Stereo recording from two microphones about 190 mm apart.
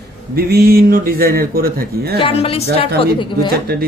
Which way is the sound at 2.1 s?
30° left (ahead or behind).